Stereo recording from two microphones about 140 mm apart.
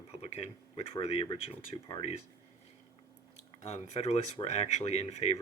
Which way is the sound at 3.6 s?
50° left (ahead or behind).